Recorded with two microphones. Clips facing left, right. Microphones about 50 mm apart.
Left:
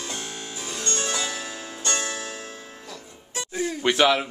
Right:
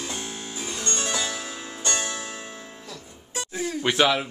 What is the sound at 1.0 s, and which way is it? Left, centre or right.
Music, centre.